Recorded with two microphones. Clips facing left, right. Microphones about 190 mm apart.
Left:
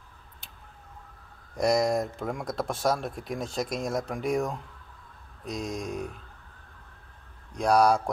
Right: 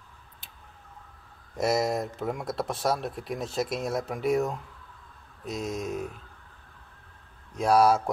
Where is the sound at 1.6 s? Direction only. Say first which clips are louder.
Left 2 dB; 5° right (ahead or behind).